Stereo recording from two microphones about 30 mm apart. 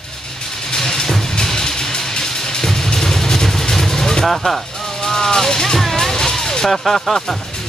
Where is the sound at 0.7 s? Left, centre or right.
Left.